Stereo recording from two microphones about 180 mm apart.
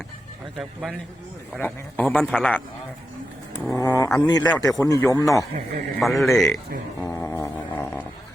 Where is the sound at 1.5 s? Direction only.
10° left (ahead or behind).